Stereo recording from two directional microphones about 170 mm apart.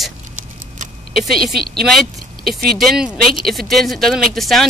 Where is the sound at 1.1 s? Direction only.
Centre (ahead or behind).